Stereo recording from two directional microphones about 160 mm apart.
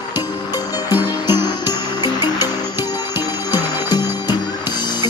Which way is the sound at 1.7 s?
25° left (ahead or behind).